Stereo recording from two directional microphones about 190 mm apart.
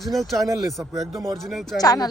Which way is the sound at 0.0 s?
Centre (ahead or behind).